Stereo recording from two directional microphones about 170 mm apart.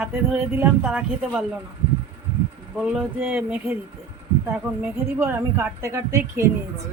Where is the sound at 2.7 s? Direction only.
5° right (ahead or behind).